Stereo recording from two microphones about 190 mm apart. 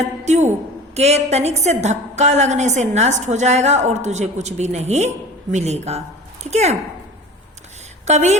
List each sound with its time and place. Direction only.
0.3 s a woman's voice: 35° right (ahead or behind)
8.0 s a woman's voice: 35° right (ahead or behind)